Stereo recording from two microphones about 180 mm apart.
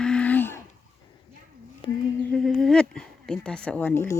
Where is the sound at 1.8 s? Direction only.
30° left (ahead or behind).